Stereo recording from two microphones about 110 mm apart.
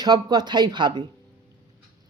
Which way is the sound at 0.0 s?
40° right (ahead or behind).